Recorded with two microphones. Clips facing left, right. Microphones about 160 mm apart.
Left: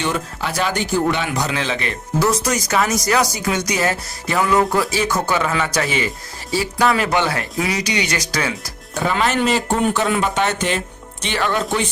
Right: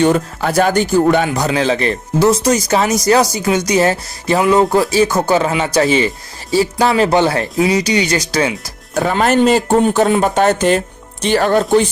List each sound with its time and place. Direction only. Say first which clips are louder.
0.0 s speech: right 9 dB; 45° right (ahead or behind); by 8.5 s 25° right (ahead or behind)
9.0 s speech: right 6 dB; 45° right (ahead or behind)